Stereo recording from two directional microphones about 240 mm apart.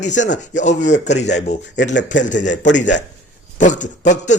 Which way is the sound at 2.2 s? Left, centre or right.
Left.